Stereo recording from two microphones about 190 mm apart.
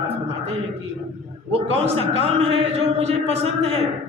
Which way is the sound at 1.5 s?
30° right (ahead or behind).